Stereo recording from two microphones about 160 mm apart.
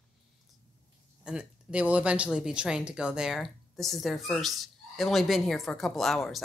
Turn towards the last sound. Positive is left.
turn(degrees=0)  # may be behind; listen again after turning